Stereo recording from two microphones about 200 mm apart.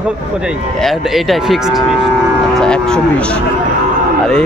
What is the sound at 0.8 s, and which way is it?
A man's voice, centre (ahead or behind).